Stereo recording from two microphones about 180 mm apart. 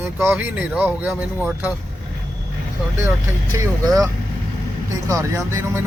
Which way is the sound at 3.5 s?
20° right (ahead or behind).